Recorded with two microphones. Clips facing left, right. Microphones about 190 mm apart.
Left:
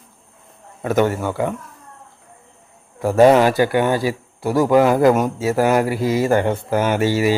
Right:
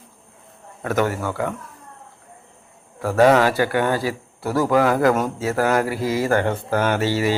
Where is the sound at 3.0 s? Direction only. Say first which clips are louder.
Left 3 dB; 20° left (ahead or behind).